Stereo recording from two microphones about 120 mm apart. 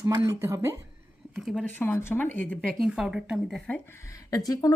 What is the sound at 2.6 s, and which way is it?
A woman's voice, centre (ahead or behind).